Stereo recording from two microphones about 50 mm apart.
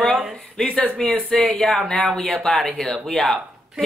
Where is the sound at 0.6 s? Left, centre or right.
Centre.